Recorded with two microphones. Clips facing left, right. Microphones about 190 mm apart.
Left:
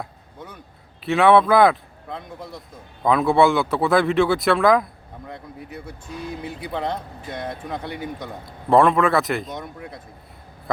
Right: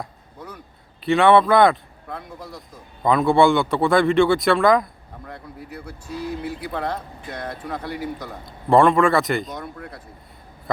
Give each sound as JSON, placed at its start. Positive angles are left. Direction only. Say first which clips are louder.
{"t": 1.0, "sound": "speech", "louder": "even", "side_deg": 0}
{"t": 2.0, "sound": "speech", "louder": "left 1 dB", "side_deg": 20}
{"t": 3.0, "sound": "speech", "louder": "right 1 dB", "side_deg": 0}
{"t": 5.3, "sound": "speech", "louder": "even", "side_deg": 20}
{"t": 8.4, "sound": "speech", "louder": "right 1 dB", "side_deg": 0}